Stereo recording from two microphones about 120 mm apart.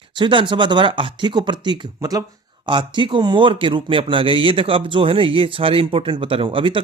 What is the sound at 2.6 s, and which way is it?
Speech, 45° right (ahead or behind).